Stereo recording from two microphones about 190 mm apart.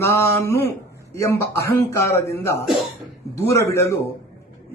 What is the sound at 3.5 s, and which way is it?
Speech, 15° left (ahead or behind).